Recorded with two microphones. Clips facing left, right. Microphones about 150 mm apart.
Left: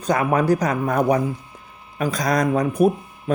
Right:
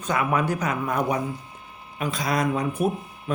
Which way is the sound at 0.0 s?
40° left (ahead or behind).